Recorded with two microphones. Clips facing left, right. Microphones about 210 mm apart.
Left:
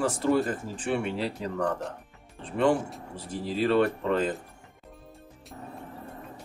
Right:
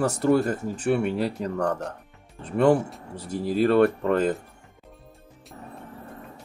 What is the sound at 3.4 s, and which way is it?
Speech, 50° right (ahead or behind).